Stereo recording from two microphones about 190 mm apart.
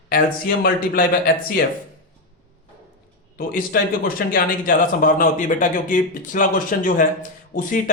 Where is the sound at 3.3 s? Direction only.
50° left (ahead or behind).